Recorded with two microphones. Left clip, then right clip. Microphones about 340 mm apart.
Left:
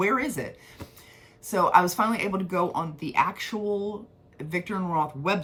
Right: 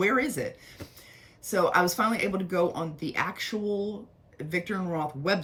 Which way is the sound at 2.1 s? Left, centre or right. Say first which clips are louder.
Left 1 dB; centre.